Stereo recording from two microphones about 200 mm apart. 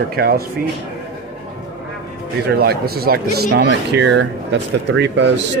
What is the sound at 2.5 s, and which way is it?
Speech, 50° right (ahead or behind).